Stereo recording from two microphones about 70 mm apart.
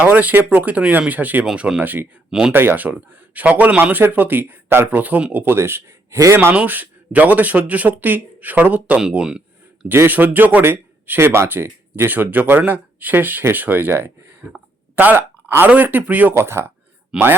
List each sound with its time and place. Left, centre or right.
0.0 s speech: right
1.5 s speech: centre
1.8 s speech: right
6.3 s speech: right
6.6 s speech: right
10.1 s speech: right
16.3 s speech: right
17.1 s speech: centre